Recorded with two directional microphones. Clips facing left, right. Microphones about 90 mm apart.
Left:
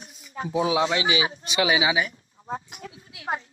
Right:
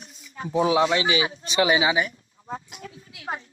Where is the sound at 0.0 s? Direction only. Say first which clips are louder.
Left 2 dB; 35° left (ahead or behind).